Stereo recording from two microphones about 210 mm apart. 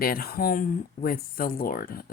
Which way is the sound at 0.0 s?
45° left (ahead or behind).